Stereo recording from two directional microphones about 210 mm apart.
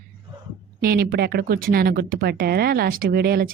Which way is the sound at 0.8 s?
45° right (ahead or behind).